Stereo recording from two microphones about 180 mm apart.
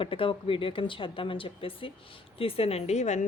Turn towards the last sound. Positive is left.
turn(degrees=40)  # may be behind; listen again after turning